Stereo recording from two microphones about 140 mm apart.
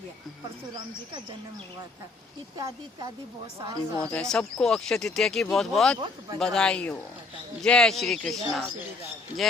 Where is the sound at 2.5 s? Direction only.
25° right (ahead or behind).